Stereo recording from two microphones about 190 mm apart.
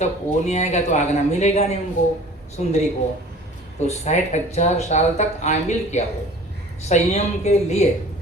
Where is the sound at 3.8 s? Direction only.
35° left (ahead or behind).